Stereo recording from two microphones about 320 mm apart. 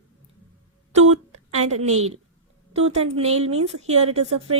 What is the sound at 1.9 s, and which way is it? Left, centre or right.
Speech, right.